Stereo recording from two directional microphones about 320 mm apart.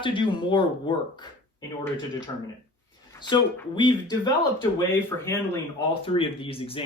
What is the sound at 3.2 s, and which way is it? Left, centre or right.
Speech, centre.